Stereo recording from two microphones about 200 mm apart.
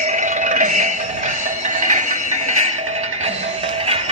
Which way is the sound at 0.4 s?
40° right (ahead or behind).